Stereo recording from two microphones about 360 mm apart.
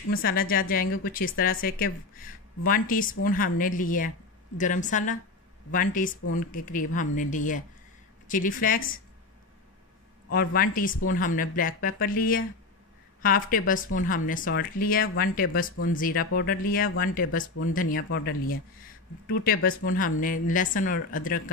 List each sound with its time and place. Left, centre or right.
0.1 s speech: left
10.3 s speech: left